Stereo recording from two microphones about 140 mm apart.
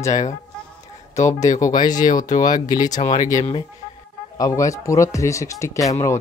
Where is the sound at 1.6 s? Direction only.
65° left (ahead or behind).